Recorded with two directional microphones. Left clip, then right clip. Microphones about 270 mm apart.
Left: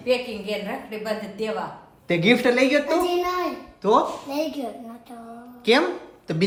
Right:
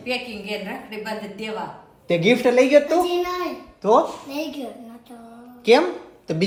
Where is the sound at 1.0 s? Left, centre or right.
Centre.